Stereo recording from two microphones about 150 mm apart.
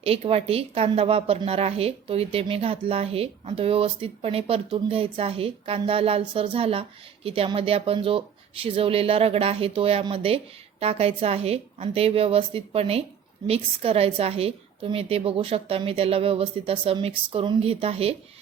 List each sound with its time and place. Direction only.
0.0 s a woman's voice: 40° right (ahead or behind)